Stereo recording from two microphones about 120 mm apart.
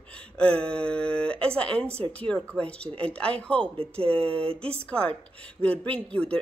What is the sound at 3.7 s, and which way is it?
Speech, 50° right (ahead or behind).